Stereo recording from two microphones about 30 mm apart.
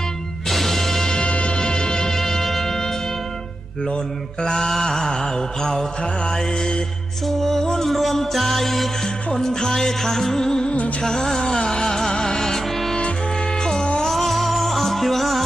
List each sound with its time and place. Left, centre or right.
0.4 s music: centre
1.2 s music: left
1.5 s music: left
4.4 s mantra: left
7.3 s music: centre
7.9 s music: centre
9.3 s music: centre
14.1 s music: centre